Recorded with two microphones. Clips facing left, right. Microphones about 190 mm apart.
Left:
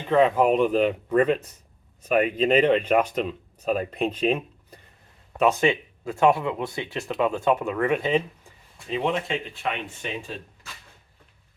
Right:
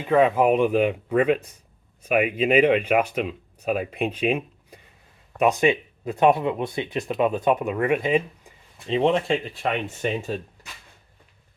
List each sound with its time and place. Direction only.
0.0 s speech: 5° right (ahead or behind)
8.9 s speech: 30° right (ahead or behind)